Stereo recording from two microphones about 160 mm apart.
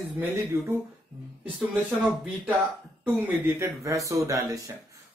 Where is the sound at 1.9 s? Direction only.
5° right (ahead or behind).